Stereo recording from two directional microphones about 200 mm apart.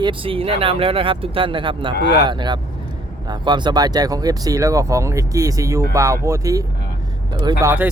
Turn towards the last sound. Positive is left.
turn(degrees=-10)  # may be behind; listen again after turning